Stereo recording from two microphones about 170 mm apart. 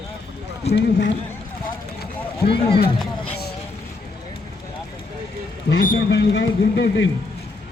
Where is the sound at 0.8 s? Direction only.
90° left.